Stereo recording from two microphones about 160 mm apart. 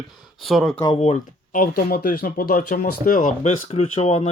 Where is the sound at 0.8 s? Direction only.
40° left (ahead or behind).